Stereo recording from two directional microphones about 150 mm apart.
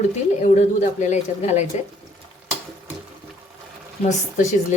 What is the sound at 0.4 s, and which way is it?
A woman's voice, 50° left (ahead or behind).